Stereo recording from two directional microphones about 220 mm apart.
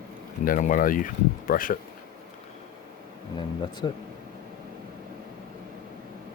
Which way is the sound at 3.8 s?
20° left (ahead or behind).